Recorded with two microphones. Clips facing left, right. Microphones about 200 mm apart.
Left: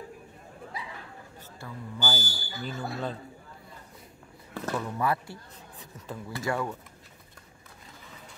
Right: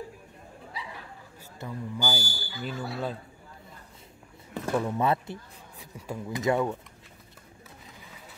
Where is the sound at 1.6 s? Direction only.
15° right (ahead or behind).